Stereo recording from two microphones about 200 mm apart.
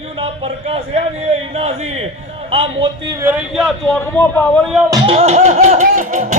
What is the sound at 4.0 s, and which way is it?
Speech, 10° left (ahead or behind).